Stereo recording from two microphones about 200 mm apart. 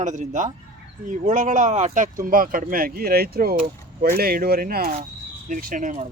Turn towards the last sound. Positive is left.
turn(degrees=-40)  # may be behind; listen again after turning